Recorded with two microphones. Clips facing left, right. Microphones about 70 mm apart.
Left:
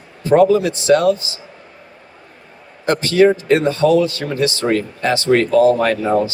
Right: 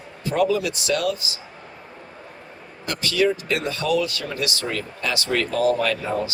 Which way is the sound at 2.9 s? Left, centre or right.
Left.